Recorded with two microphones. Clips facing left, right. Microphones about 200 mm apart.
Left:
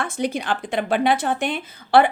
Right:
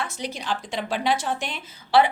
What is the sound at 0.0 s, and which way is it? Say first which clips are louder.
Speech: left 7 dB; 55° left (ahead or behind).